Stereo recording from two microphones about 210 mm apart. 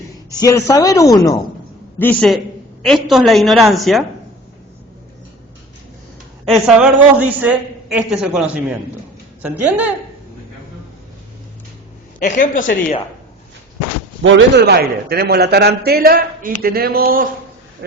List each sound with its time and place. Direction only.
0.4 s speech: 15° left (ahead or behind)
2.0 s a man's voice: 5° left (ahead or behind)
6.5 s a man's voice: 5° right (ahead or behind)
12.2 s speech: 40° left (ahead or behind)
14.3 s a man's voice: 60° right (ahead or behind); by 17.2 s 45° right (ahead or behind)